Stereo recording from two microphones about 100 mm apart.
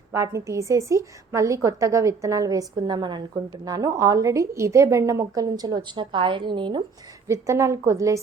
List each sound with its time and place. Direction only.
0.1 s a woman's voice: 30° right (ahead or behind); by 6.8 s 55° right (ahead or behind)
7.3 s a woman's voice: 30° right (ahead or behind)